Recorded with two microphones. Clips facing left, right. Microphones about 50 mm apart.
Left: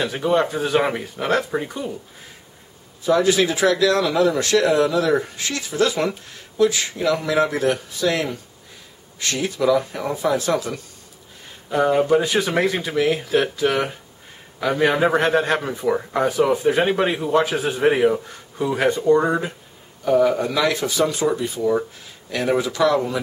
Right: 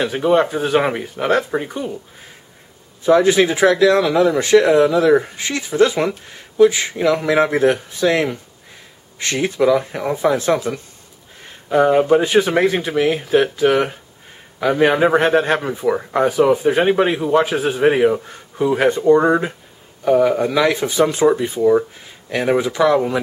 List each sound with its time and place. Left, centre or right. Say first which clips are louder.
0.0 s a man's voice: right 4 dB; centre
3.0 s speech: right 4 dB; right
11.7 s a man's voice: right 4 dB; centre